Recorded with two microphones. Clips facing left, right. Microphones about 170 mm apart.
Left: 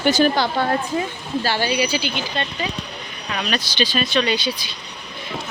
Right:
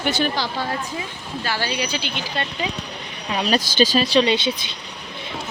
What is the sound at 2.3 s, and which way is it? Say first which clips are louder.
Speech: left 1 dB; 10° right (ahead or behind).